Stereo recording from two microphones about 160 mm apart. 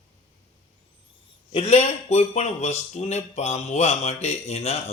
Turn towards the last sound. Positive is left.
turn(degrees=40)  # may be behind; listen again after turning